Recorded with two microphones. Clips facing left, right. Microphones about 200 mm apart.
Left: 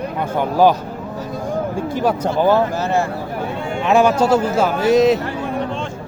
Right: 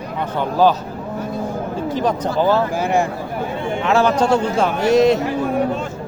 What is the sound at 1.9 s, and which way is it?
Speech, 10° left (ahead or behind).